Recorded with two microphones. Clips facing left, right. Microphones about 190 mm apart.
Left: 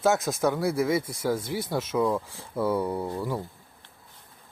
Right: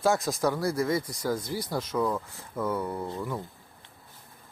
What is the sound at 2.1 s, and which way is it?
Speech, 10° left (ahead or behind).